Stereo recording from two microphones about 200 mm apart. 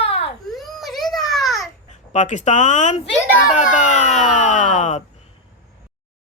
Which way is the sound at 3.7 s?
35° left (ahead or behind).